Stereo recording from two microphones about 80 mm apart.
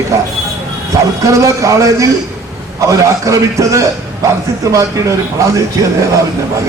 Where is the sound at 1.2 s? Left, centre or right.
Right.